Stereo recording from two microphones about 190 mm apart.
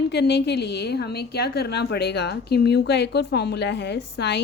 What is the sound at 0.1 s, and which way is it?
A woman's voice, 60° left (ahead or behind).